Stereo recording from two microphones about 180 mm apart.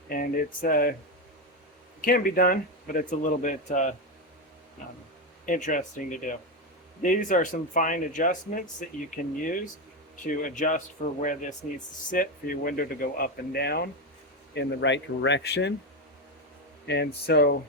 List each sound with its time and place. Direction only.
0.1 s speech: 55° left (ahead or behind)
2.0 s speech: 50° left (ahead or behind)
5.5 s speech: 45° left (ahead or behind)
14.5 s speech: 80° left
16.8 s speech: 70° left (ahead or behind)